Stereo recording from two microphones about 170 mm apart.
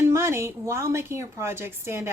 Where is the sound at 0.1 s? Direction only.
15° right (ahead or behind).